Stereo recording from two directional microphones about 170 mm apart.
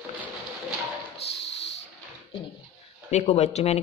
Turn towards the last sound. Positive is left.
turn(degrees=40)  # may be behind; listen again after turning